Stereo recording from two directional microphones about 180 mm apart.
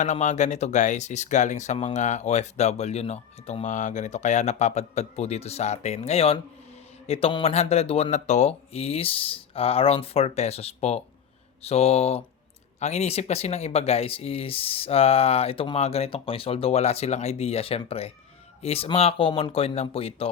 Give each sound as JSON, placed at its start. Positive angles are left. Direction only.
{"t": 0.0, "sound": "speech", "side_deg": 40}